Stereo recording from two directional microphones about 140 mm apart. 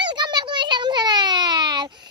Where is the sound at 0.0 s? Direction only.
35° right (ahead or behind).